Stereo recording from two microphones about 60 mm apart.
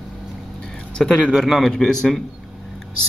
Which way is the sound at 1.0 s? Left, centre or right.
Centre.